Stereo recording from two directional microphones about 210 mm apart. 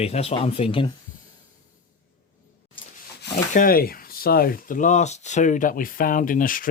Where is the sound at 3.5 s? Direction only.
40° left (ahead or behind).